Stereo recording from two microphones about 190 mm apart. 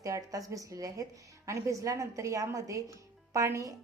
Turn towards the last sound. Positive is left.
turn(degrees=-15)  # may be behind; listen again after turning